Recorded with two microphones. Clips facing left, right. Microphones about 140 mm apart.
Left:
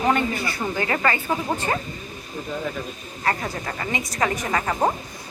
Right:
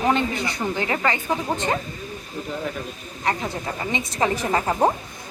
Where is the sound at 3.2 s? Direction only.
15° right (ahead or behind).